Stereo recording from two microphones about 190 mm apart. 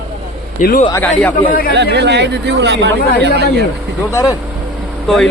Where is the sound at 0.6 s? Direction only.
50° left (ahead or behind).